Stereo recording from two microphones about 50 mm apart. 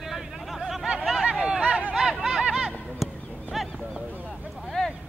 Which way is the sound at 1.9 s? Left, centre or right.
Centre.